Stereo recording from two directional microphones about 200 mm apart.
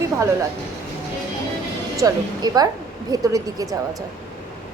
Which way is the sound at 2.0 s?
20° right (ahead or behind).